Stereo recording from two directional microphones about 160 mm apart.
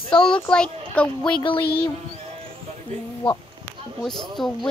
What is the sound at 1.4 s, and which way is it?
Speech, 30° left (ahead or behind).